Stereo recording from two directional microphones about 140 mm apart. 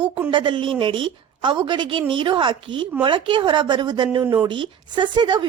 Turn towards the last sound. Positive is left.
turn(degrees=-35)  # may be behind; listen again after turning